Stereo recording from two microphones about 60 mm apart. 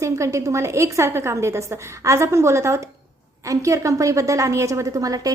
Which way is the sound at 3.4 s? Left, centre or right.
Right.